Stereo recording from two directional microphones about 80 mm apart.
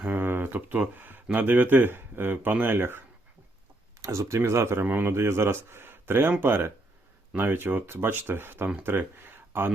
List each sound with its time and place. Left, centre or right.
0.0 s speech: right
4.0 s speech: right